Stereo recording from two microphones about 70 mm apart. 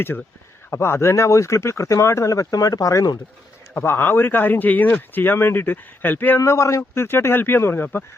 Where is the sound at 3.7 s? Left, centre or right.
Left.